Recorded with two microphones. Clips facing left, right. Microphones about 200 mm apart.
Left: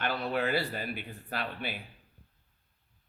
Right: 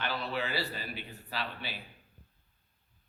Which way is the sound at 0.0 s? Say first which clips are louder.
Left 4 dB; 50° left (ahead or behind).